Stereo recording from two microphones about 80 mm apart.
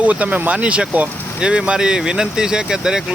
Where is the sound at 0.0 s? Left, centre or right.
Centre.